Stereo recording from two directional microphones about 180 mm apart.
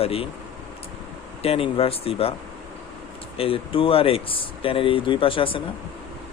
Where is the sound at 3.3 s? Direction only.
30° left (ahead or behind).